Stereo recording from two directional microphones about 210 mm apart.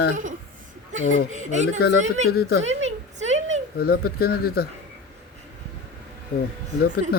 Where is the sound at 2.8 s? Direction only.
30° right (ahead or behind).